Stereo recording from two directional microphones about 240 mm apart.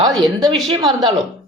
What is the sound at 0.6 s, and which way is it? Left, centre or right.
Speech, centre.